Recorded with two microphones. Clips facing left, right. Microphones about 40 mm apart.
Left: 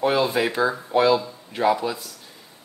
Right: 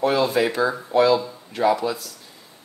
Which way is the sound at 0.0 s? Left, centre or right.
Centre.